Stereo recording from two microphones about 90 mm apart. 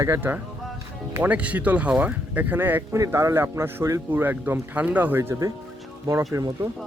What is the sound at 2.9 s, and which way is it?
A man's voice, 35° right (ahead or behind).